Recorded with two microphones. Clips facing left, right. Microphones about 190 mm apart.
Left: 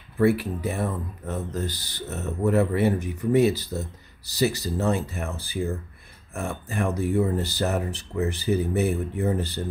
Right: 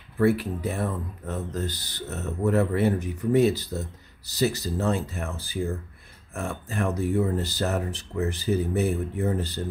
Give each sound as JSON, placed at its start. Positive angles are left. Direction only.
{"t": 0.2, "sound": "speech", "side_deg": 10}